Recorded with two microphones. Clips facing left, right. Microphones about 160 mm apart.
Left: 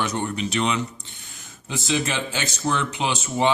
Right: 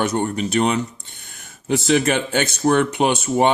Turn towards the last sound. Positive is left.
turn(degrees=-55)  # may be behind; listen again after turning